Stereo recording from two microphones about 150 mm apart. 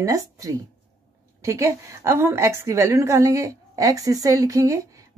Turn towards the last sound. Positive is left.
turn(degrees=-20)  # may be behind; listen again after turning